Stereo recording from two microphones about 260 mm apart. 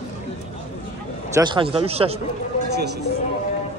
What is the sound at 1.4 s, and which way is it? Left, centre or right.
Speech, centre.